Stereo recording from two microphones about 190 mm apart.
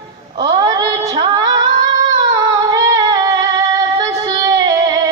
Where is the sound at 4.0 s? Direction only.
20° right (ahead or behind).